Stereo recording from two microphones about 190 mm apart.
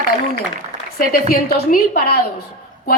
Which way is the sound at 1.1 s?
50° left (ahead or behind).